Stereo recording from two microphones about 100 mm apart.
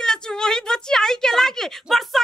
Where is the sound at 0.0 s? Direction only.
5° left (ahead or behind).